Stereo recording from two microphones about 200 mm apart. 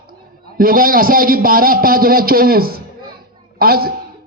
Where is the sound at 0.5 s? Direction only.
45° right (ahead or behind).